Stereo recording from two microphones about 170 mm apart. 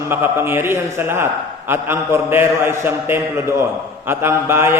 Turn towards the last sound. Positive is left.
turn(degrees=-15)  # may be behind; listen again after turning